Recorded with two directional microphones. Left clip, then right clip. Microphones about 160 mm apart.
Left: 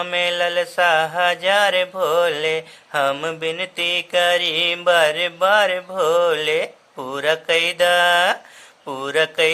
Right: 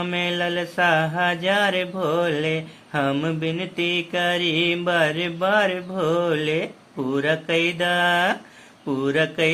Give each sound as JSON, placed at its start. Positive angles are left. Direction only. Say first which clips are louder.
{"t": 0.0, "sound": "mantra", "louder": "left 4 dB", "side_deg": 30}